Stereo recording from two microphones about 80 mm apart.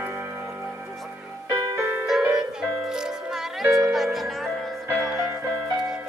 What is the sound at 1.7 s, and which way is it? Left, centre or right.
Music, right.